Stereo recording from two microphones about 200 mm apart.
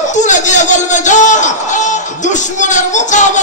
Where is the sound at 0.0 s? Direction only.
40° left (ahead or behind).